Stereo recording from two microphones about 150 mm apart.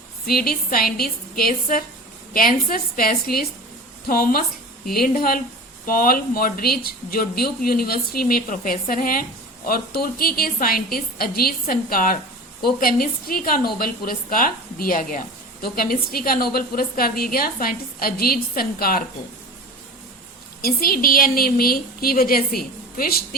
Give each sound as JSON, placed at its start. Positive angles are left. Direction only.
{"t": 0.3, "sound": "a woman's voice", "side_deg": 80}
{"t": 9.6, "sound": "a woman's voice", "side_deg": 85}
{"t": 15.6, "sound": "a woman's voice", "side_deg": 80}
{"t": 20.6, "sound": "a woman's voice", "side_deg": 80}